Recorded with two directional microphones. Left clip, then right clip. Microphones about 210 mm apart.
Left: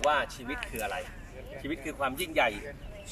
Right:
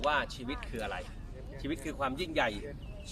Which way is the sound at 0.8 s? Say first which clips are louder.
Left 4 dB; 10° right (ahead or behind).